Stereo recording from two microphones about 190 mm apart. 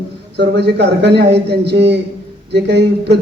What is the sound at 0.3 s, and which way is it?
A man's voice, 60° right (ahead or behind).